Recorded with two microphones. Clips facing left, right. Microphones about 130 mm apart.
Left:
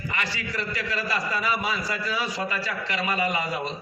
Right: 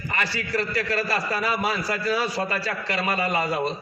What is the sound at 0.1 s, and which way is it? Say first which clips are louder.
A man's voice: right 5 dB; 40° right (ahead or behind).